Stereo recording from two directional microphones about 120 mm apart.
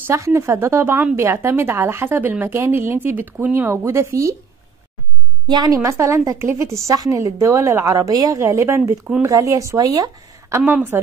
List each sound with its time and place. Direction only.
0.0 s a woman's voice: 25° right (ahead or behind)
5.5 s a woman's voice: 30° right (ahead or behind)
10.6 s a woman's voice: 15° right (ahead or behind)